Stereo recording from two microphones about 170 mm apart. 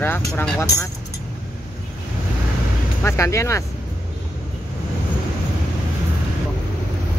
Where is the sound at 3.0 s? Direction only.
15° left (ahead or behind).